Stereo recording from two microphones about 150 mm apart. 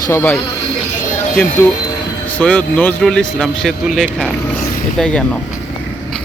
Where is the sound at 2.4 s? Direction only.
5° left (ahead or behind).